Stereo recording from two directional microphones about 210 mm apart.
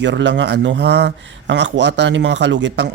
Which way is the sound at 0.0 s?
60° right (ahead or behind).